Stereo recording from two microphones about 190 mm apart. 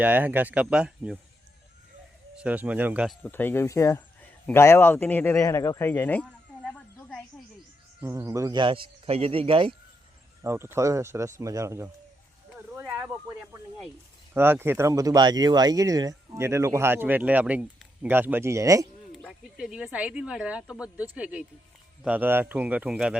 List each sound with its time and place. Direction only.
0.0 s speech: 10° right (ahead or behind)
2.3 s speech: 5° right (ahead or behind)
3.2 s speech: 10° left (ahead or behind)
8.0 s speech: 15° right (ahead or behind)
10.4 s speech: 15° right (ahead or behind)
12.5 s a sound: 10° right (ahead or behind)
14.3 s speech: 10° right (ahead or behind)
19.1 s speech: centre (ahead or behind)